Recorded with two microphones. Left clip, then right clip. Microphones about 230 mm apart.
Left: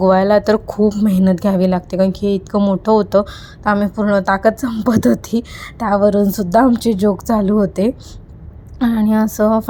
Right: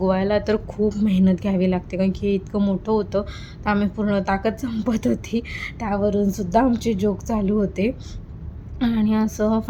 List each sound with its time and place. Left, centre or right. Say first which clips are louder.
0.0 s a woman's voice: left 9 dB; left